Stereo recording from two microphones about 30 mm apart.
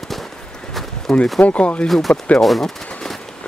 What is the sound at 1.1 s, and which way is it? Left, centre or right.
Speech, centre.